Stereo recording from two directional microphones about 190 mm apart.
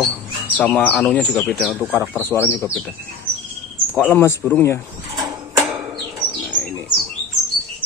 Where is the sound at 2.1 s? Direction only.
10° left (ahead or behind).